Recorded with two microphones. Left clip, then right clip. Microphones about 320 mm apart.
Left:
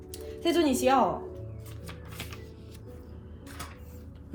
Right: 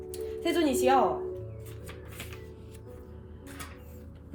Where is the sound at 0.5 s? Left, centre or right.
Centre.